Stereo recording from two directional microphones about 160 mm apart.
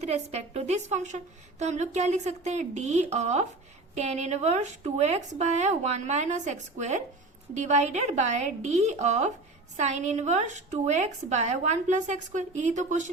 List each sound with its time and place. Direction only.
0.0 s a woman's voice: 40° right (ahead or behind)